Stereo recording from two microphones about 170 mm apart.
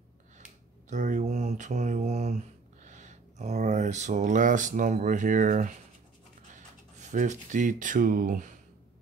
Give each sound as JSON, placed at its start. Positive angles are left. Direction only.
{"t": 0.8, "sound": "speech", "side_deg": -45}
{"t": 7.0, "sound": "speech", "side_deg": -45}